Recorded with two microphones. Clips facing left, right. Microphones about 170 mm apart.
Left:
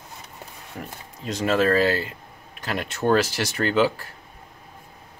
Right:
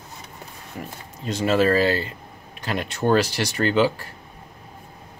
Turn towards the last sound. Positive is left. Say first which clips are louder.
# right 1 dB
turn(degrees=0)  # may be behind; listen again after turning